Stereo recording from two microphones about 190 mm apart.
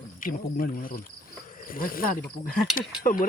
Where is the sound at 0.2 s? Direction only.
45° left (ahead or behind).